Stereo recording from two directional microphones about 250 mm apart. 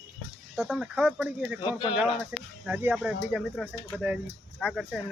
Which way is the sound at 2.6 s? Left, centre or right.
Centre.